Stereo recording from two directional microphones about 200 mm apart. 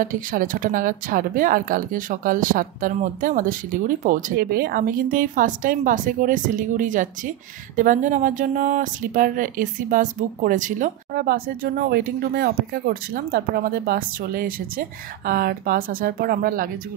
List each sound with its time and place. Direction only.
0.0 s speech: 45° right (ahead or behind)